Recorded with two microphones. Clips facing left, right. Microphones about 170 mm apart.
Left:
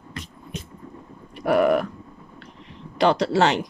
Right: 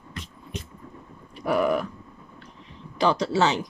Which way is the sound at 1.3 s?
65° left (ahead or behind).